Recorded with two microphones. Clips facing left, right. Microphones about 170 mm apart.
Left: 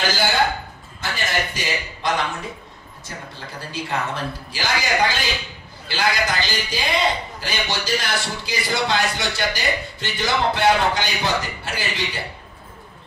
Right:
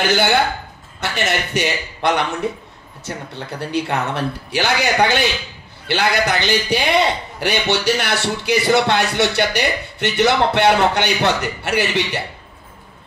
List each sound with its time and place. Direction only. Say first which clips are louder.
0.1 s a man's voice: right 4 dB; 65° right (ahead or behind)
3.3 s a man's voice: right 10 dB; 65° right (ahead or behind)